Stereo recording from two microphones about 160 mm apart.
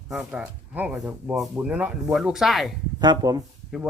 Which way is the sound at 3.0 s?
25° right (ahead or behind).